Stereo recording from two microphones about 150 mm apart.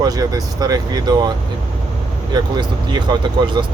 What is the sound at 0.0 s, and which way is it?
Speech, 25° right (ahead or behind).